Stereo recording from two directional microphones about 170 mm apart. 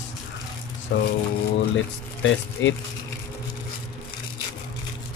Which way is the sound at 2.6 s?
90° left.